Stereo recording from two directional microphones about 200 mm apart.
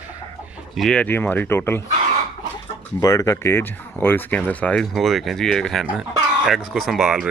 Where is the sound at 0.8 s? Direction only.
5° left (ahead or behind).